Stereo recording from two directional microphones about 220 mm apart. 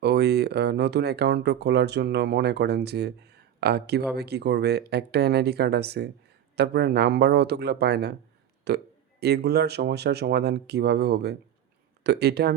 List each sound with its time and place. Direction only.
0.0 s speech: 50° right (ahead or behind)